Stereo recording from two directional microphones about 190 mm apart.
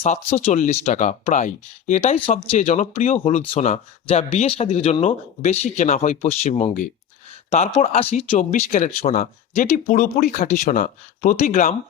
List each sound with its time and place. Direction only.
0.0 s speech: 35° left (ahead or behind)